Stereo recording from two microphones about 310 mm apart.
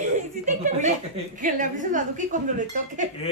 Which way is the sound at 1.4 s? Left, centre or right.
Right.